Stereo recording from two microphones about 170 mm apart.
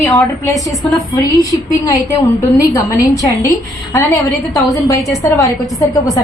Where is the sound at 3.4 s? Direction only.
20° left (ahead or behind).